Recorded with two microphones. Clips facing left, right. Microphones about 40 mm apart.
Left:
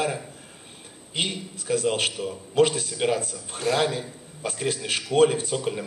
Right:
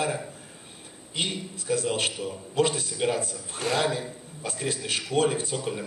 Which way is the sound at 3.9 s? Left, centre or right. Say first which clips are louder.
Even; left.